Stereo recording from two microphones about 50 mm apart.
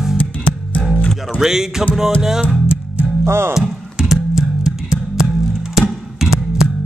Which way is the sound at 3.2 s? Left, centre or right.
Right.